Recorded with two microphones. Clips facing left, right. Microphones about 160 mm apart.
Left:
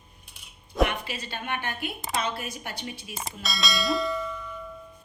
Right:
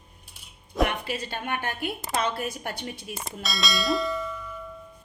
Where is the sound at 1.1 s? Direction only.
45° right (ahead or behind).